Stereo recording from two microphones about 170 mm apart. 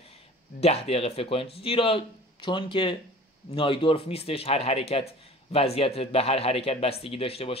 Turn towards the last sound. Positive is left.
turn(degrees=35)  # may be behind; listen again after turning